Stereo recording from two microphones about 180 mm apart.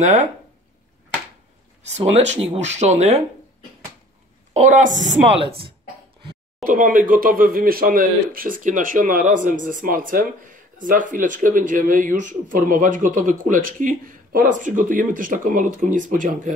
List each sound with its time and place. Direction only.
0.0 s speech: 40° right (ahead or behind)
2.0 s speech: 35° right (ahead or behind)
4.6 s speech: 45° right (ahead or behind)
6.6 s speech: 50° right (ahead or behind)